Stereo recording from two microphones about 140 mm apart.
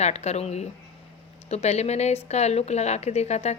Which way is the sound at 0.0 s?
50° left (ahead or behind).